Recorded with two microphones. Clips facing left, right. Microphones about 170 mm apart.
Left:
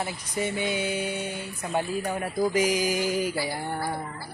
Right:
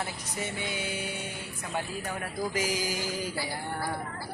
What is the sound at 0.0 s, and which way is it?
Speech, 20° left (ahead or behind).